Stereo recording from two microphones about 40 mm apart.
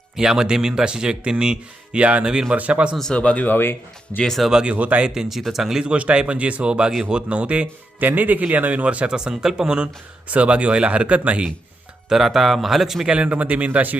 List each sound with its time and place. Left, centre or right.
0.2 s a man's voice: centre; by 2.9 s right
3.1 s speech: left
3.4 s speech: left
4.4 s speech: centre
4.7 s speech: right
5.3 s speech: centre
5.8 s a man's voice: right
7.9 s a man's voice: right
9.0 s a man's voice: centre
10.2 s speech: right
12.0 s a man's voice: centre
13.1 s speech: right